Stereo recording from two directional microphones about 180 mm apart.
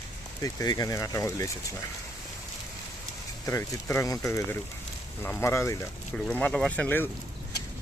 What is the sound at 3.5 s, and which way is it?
Speech, 15° left (ahead or behind).